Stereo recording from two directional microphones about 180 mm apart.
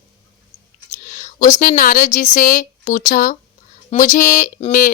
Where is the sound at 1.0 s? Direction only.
45° left (ahead or behind).